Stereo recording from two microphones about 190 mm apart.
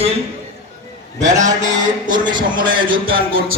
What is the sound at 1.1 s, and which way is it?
A man's voice, 40° right (ahead or behind).